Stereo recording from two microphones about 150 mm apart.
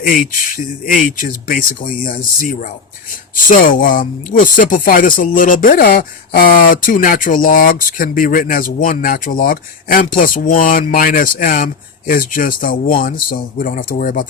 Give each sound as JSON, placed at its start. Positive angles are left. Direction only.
{"t": 0.0, "sound": "speech", "side_deg": 65}